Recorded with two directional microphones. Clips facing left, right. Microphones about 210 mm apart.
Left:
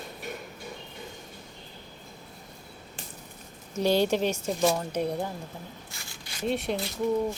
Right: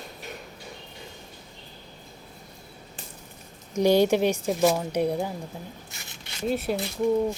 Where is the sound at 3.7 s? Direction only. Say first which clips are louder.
Right 4 dB; 15° right (ahead or behind).